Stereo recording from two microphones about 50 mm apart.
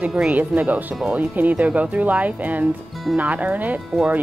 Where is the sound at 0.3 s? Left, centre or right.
Right.